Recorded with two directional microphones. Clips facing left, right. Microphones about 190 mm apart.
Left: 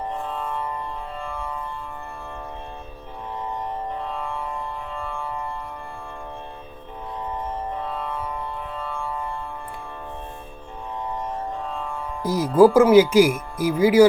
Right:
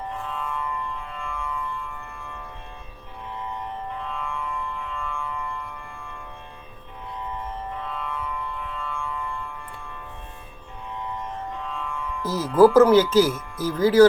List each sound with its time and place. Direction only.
0.1 s music: 40° left (ahead or behind)
3.9 s music: 40° left (ahead or behind)
7.7 s music: 35° left (ahead or behind)
11.5 s music: 35° left (ahead or behind)
12.2 s speech: 15° left (ahead or behind)